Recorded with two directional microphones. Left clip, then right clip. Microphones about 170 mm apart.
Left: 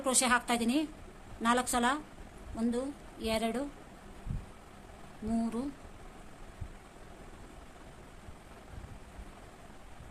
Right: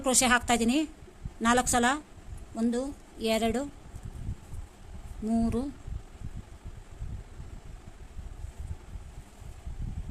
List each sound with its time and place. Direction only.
0.0 s a woman's voice: 45° right (ahead or behind)
5.4 s a woman's voice: 45° right (ahead or behind)